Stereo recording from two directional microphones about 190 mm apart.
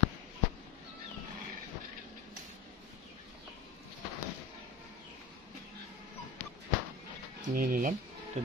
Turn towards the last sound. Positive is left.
turn(degrees=-50)  # may be behind; listen again after turning